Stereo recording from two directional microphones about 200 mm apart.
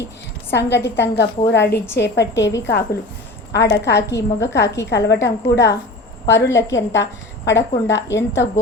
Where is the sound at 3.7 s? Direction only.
60° left (ahead or behind).